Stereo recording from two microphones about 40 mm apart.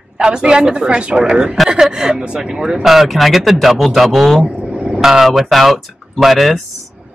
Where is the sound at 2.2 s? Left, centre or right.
Right.